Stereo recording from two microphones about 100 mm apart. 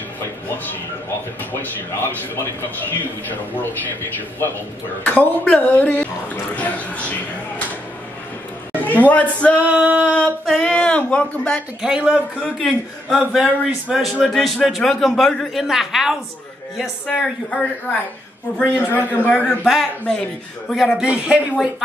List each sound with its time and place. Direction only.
1.5 s a man's voice: 20° left (ahead or behind)
5.0 s speech: 15° left (ahead or behind)
8.8 s speech: 15° left (ahead or behind)
9.7 s a sound: 15° right (ahead or behind)
10.4 s speech: 5° left (ahead or behind)
11.8 s a sound: 5° right (ahead or behind)
13.1 s speech: centre (ahead or behind)
13.8 s a sound: 10° right (ahead or behind)
14.2 s speech: centre (ahead or behind)
17.1 s speech: 10° left (ahead or behind)
18.6 s a man's voice: 20° left (ahead or behind)
19.6 s speech: centre (ahead or behind)